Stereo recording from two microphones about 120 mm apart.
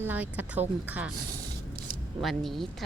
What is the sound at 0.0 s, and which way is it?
Speech, 15° right (ahead or behind).